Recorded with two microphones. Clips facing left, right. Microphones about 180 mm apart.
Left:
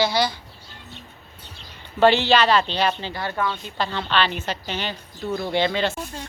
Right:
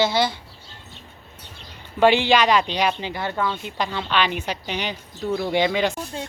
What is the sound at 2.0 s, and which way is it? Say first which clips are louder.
Speech: even; 15° right (ahead or behind).